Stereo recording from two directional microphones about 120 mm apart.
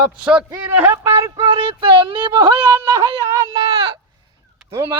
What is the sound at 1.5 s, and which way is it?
Speech, 50° right (ahead or behind).